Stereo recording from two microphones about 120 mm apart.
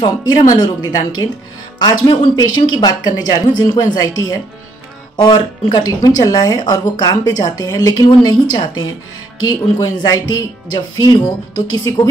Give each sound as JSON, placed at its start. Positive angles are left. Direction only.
{"t": 0.0, "sound": "speech", "side_deg": 35}